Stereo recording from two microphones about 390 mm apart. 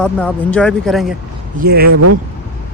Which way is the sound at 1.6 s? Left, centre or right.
Right.